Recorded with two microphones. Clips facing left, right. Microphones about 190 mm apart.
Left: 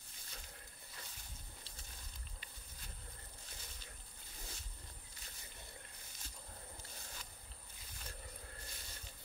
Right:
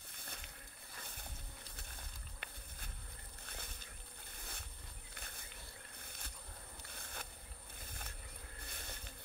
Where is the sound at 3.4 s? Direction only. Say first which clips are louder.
Right 7 dB; 60° right (ahead or behind).